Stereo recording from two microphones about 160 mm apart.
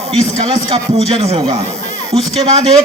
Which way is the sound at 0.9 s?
40° right (ahead or behind).